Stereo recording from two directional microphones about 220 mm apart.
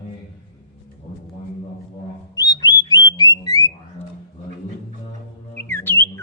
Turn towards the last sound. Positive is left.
turn(degrees=10)  # may be behind; listen again after turning